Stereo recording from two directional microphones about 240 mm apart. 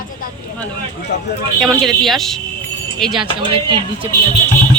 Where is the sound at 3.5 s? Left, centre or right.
Right.